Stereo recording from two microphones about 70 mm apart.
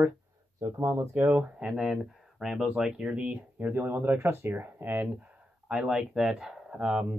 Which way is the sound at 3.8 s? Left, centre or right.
Right.